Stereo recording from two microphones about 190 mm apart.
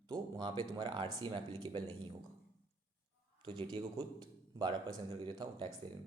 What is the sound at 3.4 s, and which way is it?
Speech, 30° right (ahead or behind).